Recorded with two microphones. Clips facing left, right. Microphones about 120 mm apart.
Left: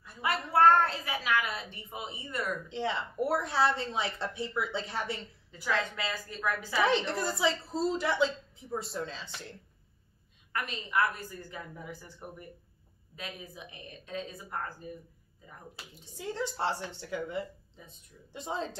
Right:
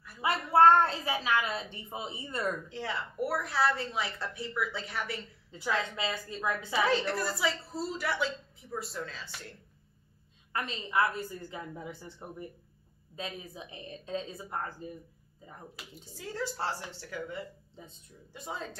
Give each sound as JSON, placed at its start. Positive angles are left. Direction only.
{"t": 0.2, "sound": "a woman's voice", "side_deg": -25}
{"t": 2.7, "sound": "a woman's voice", "side_deg": 25}
{"t": 5.5, "sound": "a woman's voice", "side_deg": -20}
{"t": 7.2, "sound": "a woman's voice", "side_deg": 25}
{"t": 10.5, "sound": "a woman's voice", "side_deg": -25}
{"t": 15.7, "sound": "a woman's voice", "side_deg": 20}
{"t": 17.8, "sound": "a woman's voice", "side_deg": -25}
{"t": 18.3, "sound": "a woman's voice", "side_deg": 25}